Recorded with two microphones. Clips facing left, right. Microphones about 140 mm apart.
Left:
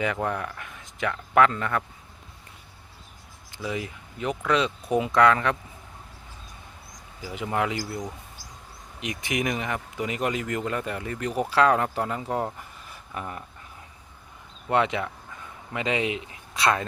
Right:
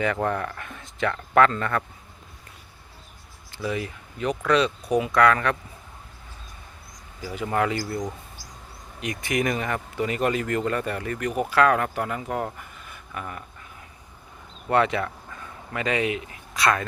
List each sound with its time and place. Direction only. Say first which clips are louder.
0.0 s speech: right 2 dB; 10° left (ahead or behind)
3.5 s speech: right 3 dB; 15° left (ahead or behind)
7.2 s speech: right 2 dB; 15° left (ahead or behind)
12.5 s a sound: right 1 dB; 30° left (ahead or behind)
14.7 s speech: right 2 dB; 15° left (ahead or behind)